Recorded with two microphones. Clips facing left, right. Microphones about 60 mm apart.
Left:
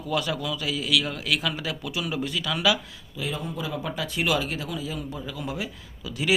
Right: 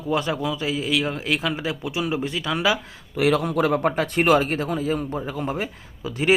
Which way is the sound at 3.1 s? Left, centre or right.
Right.